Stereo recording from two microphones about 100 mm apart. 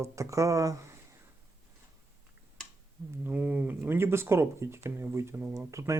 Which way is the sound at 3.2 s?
15° right (ahead or behind).